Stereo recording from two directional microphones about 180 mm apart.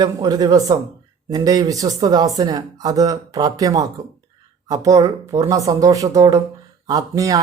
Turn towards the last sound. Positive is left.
turn(degrees=-20)  # may be behind; listen again after turning